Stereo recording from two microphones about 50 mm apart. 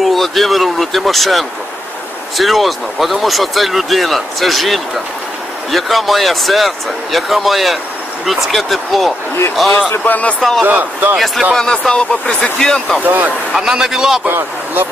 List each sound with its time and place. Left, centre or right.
0.0 s speech: centre
9.8 s a man's voice: left
10.6 s speech: right
11.1 s speech: centre
11.5 s speech: centre
13.0 s speech: right
13.5 s a man's voice: centre
14.2 s speech: right